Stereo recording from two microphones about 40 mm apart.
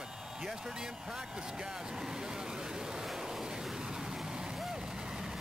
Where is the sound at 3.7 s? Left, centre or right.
Centre.